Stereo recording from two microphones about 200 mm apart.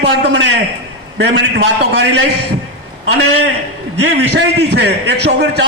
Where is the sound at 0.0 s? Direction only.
60° right (ahead or behind).